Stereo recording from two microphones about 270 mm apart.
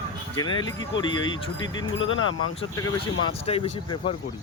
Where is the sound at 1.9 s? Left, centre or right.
Left.